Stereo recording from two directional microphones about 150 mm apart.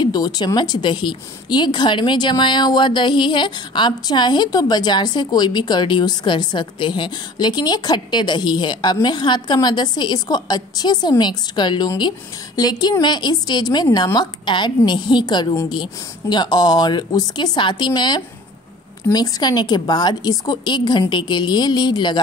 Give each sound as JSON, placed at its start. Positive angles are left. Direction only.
{"t": 0.0, "sound": "a woman's voice", "side_deg": 25}